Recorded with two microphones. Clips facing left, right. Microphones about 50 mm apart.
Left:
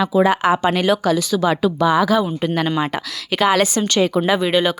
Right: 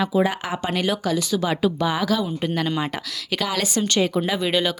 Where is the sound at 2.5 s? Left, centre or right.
Left.